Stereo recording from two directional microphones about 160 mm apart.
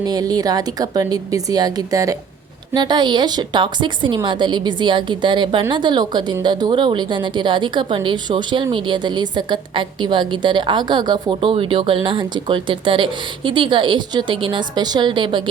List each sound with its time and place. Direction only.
0.0 s a woman's voice: 25° right (ahead or behind)